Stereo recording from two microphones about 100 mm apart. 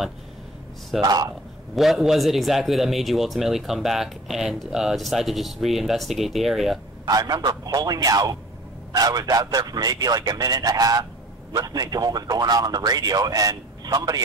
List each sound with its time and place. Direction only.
1.0 s a man's voice: 40° right (ahead or behind)
1.8 s a man's voice: 5° right (ahead or behind)
7.1 s a man's voice: 40° right (ahead or behind)